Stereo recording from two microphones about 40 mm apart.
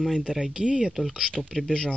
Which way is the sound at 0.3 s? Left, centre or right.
Centre.